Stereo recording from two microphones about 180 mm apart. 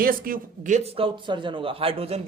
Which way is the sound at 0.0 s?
50° right (ahead or behind).